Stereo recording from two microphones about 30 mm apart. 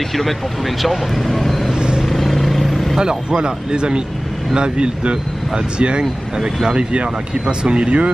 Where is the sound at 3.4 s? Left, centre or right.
Right.